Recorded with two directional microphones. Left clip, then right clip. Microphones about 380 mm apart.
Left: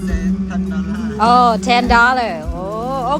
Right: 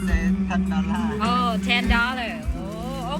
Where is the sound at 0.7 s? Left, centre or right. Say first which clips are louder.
Left 2 dB; centre.